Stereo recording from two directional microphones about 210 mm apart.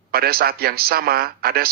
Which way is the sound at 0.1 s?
45° right (ahead or behind).